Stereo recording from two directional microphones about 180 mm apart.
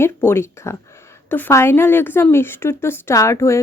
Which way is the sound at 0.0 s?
15° left (ahead or behind).